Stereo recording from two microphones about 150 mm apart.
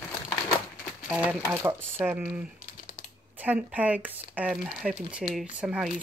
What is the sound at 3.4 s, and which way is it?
Speech, 10° right (ahead or behind).